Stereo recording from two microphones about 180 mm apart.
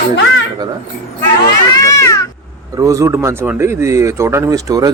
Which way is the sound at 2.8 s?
20° right (ahead or behind).